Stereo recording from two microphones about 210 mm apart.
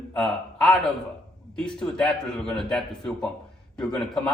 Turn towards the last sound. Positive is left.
turn(degrees=0)  # may be behind; listen again after turning